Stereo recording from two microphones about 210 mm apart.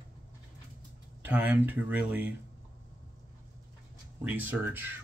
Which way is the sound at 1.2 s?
10° right (ahead or behind).